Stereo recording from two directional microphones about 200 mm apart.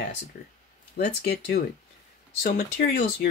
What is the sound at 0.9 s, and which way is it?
Speech, 55° left (ahead or behind).